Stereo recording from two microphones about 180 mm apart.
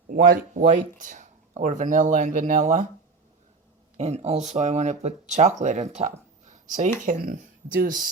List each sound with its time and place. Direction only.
0.1 s speech: 45° right (ahead or behind)
3.9 s speech: 40° right (ahead or behind)